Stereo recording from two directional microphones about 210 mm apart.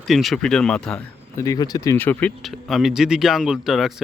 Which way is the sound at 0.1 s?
Centre (ahead or behind).